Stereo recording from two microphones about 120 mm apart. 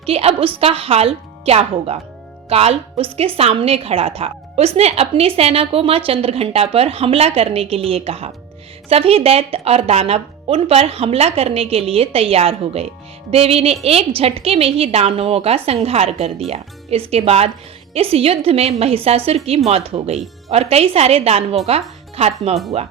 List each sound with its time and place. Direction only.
0.0 s speech: 55° right (ahead or behind)
13.3 s music: 55° right (ahead or behind)
13.8 s speech: 55° right (ahead or behind)